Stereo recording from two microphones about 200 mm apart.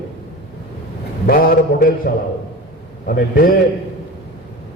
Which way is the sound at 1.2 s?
50° left (ahead or behind).